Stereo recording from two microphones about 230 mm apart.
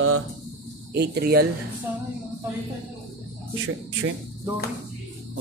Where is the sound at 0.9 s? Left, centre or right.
Right.